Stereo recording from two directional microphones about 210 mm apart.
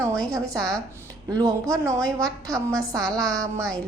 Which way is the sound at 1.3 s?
15° right (ahead or behind).